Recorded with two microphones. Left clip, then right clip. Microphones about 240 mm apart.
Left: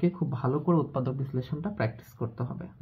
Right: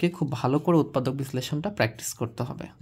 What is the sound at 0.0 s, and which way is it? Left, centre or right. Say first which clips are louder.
Speech: right 4 dB; right.